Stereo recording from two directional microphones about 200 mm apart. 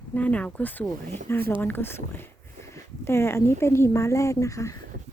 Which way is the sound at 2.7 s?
15° left (ahead or behind).